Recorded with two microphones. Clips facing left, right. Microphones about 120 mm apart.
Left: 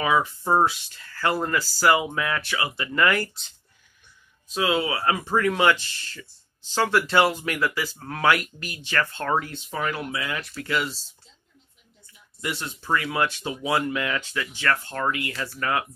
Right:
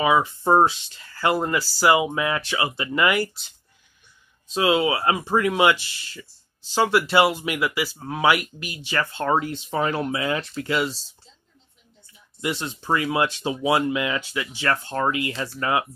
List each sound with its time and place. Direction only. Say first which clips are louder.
0.0 s speech: right 3 dB; 15° right (ahead or behind)
4.6 s speech: right 4 dB; 20° right (ahead or behind)
12.4 s speech: right 4 dB; 20° right (ahead or behind)